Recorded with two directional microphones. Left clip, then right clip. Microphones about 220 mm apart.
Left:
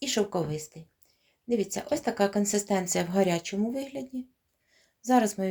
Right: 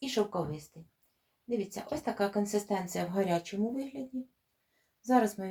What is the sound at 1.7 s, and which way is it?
Speech, 50° left (ahead or behind).